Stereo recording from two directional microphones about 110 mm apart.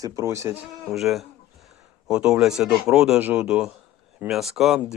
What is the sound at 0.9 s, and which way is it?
Speech, centre (ahead or behind).